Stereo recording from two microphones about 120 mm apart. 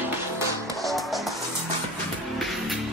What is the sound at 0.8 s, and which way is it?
Music, centre (ahead or behind).